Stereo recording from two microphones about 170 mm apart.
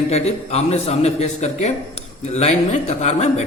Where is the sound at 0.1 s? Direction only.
40° left (ahead or behind).